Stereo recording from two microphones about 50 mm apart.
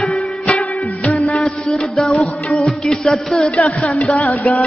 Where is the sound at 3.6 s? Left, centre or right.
Left.